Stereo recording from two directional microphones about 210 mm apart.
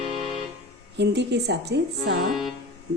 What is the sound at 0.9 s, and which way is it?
Speech, 55° right (ahead or behind).